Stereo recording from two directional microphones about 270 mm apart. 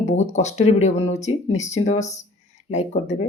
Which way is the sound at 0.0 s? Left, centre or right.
Left.